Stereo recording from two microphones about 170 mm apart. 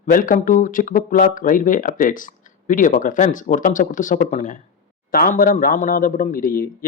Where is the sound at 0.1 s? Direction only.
55° left (ahead or behind).